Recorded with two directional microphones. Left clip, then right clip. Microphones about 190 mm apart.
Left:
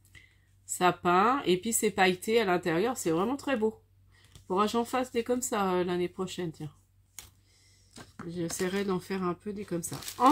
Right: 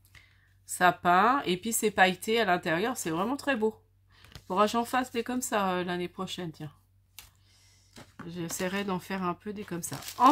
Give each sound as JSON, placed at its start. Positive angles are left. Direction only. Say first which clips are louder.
{"t": 0.7, "sound": "speech", "louder": "right 2 dB", "side_deg": -35}
{"t": 8.3, "sound": "speech", "louder": "left 1 dB", "side_deg": -40}